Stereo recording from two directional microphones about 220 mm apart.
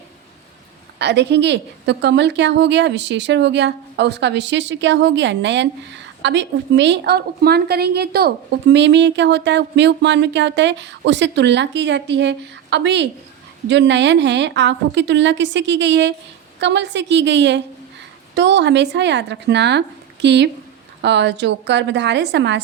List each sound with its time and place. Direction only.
0.9 s a woman's voice: 50° right (ahead or behind)